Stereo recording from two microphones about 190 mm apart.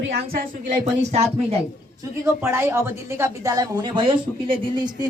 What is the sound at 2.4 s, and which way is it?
Speech, 15° right (ahead or behind).